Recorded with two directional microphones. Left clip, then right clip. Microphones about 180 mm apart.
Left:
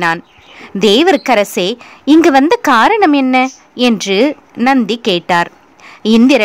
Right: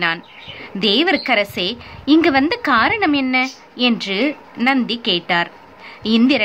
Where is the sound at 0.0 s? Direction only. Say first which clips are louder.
Left 5 dB; 45° left (ahead or behind).